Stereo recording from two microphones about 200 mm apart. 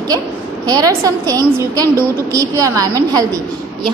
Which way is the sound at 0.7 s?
20° right (ahead or behind).